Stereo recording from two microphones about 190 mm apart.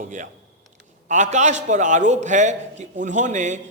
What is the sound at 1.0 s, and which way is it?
A man's voice, 40° right (ahead or behind).